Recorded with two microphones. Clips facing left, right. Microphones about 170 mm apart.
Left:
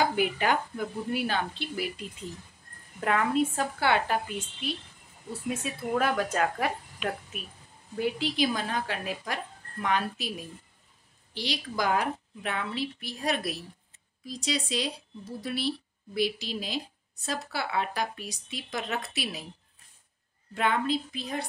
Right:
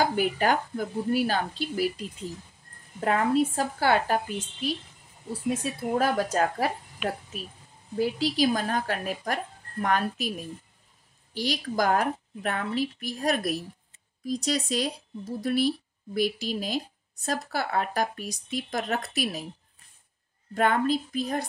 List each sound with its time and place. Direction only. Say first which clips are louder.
0.0 s a woman's voice: right 2 dB; 40° right (ahead or behind)
8.0 s a woman's voice: right 3 dB; 35° right (ahead or behind)
11.3 s a woman's voice: right 5 dB; 45° right (ahead or behind)
20.5 s a woman's voice: right 3 dB; 45° right (ahead or behind)